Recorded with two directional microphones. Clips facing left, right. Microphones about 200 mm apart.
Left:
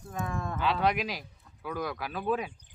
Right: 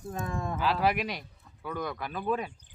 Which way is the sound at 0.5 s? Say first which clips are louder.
Even; 5° right (ahead or behind).